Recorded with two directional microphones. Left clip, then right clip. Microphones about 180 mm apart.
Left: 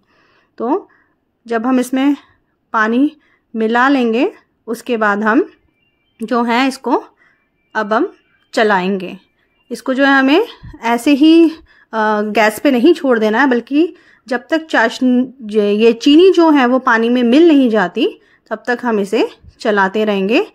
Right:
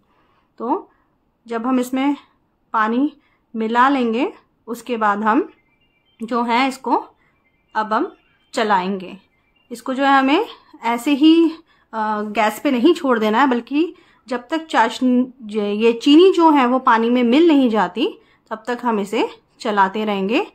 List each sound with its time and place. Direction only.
0.6 s a woman's voice: 35° left (ahead or behind)
12.0 s a woman's voice: 45° left (ahead or behind)
12.9 s a woman's voice: 20° left (ahead or behind)